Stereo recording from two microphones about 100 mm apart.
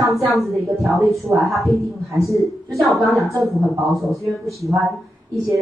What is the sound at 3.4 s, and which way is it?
A man's voice, centre (ahead or behind).